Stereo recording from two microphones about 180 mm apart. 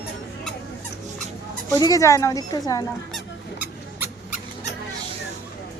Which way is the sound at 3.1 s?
10° right (ahead or behind).